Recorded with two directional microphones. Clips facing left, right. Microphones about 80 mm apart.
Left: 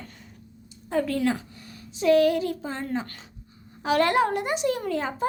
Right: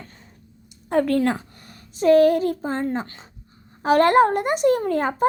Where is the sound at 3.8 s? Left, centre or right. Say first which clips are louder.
Right 6 dB; right.